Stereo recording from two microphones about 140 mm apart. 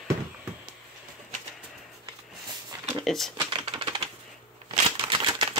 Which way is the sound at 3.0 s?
Centre (ahead or behind).